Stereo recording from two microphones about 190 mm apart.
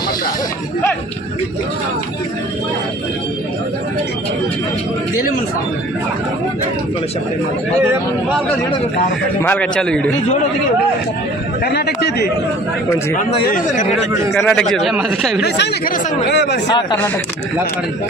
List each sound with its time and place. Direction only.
9.4 s speech: 10° left (ahead or behind)
11.6 s speech: 60° left (ahead or behind)
13.4 s speech: 45° left (ahead or behind)
14.4 s speech: 5° left (ahead or behind)
15.4 s speech: 60° left (ahead or behind)